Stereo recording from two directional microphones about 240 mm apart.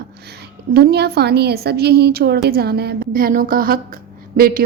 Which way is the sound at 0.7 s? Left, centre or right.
Right.